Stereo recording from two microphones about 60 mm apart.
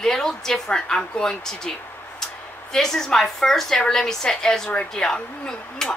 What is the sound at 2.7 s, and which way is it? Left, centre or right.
Speech, centre.